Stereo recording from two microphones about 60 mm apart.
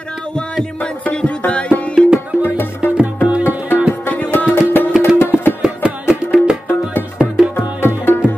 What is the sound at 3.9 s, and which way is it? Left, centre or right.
Music, left.